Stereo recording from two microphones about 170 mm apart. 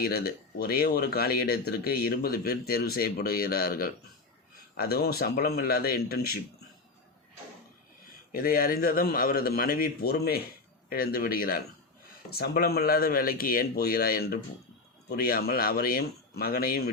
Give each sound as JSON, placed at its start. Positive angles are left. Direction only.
{"t": 0.0, "sound": "speech", "side_deg": 60}
{"t": 8.3, "sound": "speech", "side_deg": 60}